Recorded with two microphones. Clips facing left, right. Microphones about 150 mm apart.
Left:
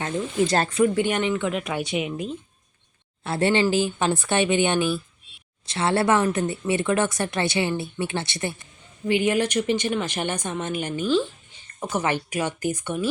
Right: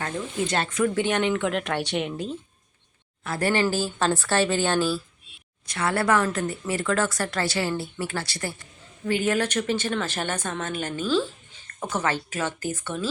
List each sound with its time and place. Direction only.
0.4 s speech: 35° left (ahead or behind)
0.9 s speech: 10° left (ahead or behind)
3.2 s a woman's voice: 25° left (ahead or behind)